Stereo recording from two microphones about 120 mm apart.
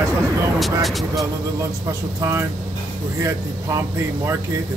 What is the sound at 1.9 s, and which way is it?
Speech, 25° right (ahead or behind).